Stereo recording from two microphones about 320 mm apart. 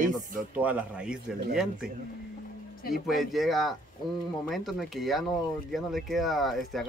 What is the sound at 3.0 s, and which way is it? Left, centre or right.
Speech, centre.